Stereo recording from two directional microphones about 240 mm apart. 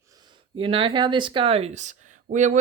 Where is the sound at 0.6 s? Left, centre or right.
Right.